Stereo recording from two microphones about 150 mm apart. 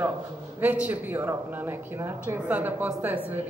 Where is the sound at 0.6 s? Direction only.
10° right (ahead or behind).